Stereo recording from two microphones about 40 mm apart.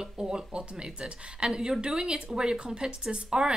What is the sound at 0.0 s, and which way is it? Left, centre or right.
A woman's voice, right.